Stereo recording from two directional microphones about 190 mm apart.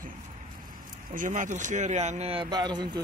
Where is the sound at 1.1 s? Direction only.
45° right (ahead or behind); by 3.0 s 20° right (ahead or behind).